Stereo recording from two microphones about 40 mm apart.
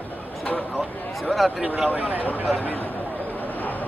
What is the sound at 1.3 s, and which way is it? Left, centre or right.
Speech, centre.